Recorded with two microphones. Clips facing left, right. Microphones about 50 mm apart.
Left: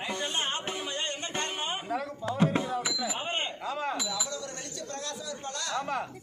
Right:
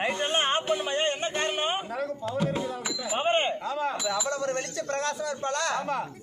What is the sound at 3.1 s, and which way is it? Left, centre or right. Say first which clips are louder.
Speech: right 8 dB; right.